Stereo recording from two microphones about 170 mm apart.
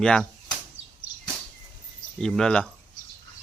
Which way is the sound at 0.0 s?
5° left (ahead or behind).